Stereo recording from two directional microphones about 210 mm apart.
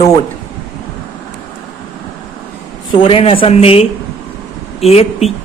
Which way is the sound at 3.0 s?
25° left (ahead or behind).